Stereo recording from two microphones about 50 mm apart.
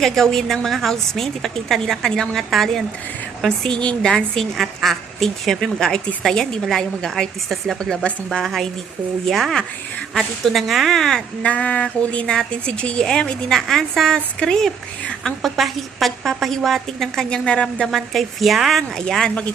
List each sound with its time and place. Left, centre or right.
0.0 s a woman's voice: centre
3.8 s speech: centre
4.1 s a woman's voice: centre
8.3 s a woman's voice: centre
11.4 s speech: left
12.2 s a woman's voice: centre
13.5 s a woman's voice: centre
15.2 s a woman's voice: centre
17.2 s speech: left
17.9 s a woman's voice: centre
18.9 s a woman's voice: centre